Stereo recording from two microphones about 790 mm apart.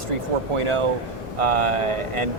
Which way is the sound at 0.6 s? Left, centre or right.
Right.